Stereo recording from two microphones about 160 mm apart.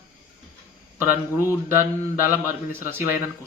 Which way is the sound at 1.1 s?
15° right (ahead or behind).